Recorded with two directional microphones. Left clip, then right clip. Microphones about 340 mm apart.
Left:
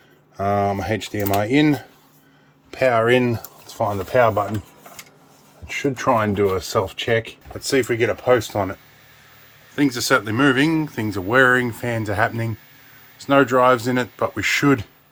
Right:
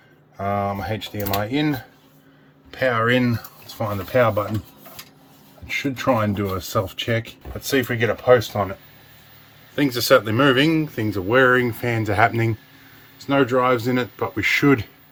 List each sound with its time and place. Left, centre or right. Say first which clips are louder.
0.3 s speech: left 3 dB; left
3.8 s speech: left 2 dB; left
6.1 s speech: left 4 dB; left
7.7 s speech: left 2 dB; centre
9.7 s speech: right 2 dB; centre